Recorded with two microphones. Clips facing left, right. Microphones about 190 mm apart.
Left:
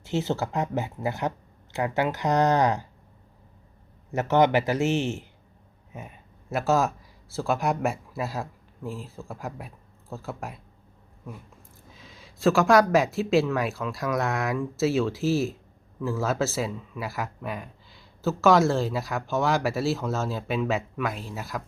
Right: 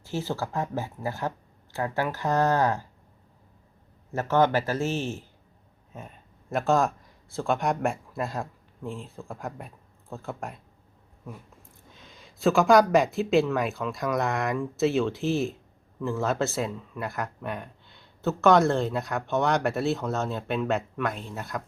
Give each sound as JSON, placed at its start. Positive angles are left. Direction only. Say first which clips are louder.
{"t": 0.0, "sound": "speech", "louder": "left 4 dB", "side_deg": 20}
{"t": 4.1, "sound": "speech", "louder": "left 2 dB", "side_deg": 20}
{"t": 5.9, "sound": "speech", "louder": "left 1 dB", "side_deg": 10}
{"t": 11.9, "sound": "speech", "louder": "left 2 dB", "side_deg": 0}